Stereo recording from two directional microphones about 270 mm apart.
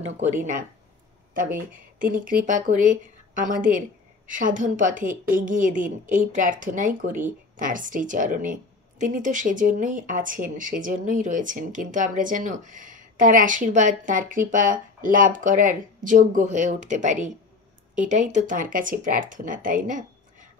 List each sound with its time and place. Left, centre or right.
0.4 s a woman's voice: right
1.7 s a woman's voice: right